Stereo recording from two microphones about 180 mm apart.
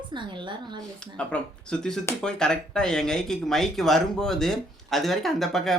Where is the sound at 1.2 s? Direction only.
5° left (ahead or behind).